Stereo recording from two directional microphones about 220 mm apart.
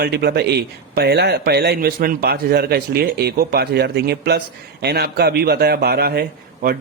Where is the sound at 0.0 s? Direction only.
45° right (ahead or behind).